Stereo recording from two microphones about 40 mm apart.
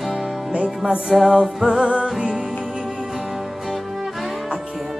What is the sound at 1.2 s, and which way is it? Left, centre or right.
Music, centre.